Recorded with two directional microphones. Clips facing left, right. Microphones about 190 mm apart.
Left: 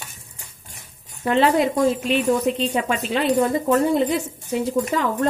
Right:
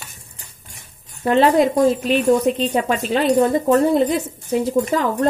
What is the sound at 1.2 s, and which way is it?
Speech, 40° right (ahead or behind).